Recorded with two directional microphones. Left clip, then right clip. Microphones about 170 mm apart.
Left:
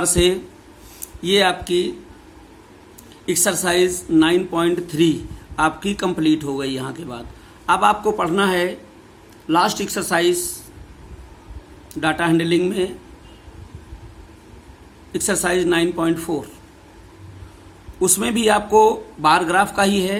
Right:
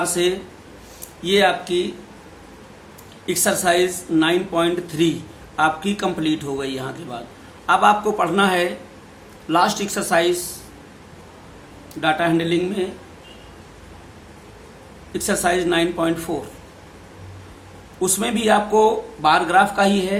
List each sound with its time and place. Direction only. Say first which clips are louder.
0.0 s speech: left 3 dB; 50° left (ahead or behind)
3.2 s speech: right 1 dB; 45° left (ahead or behind)
11.9 s speech: even; 40° left (ahead or behind)
15.1 s speech: even; 40° left (ahead or behind)
18.0 s speech: left 2 dB; 40° left (ahead or behind)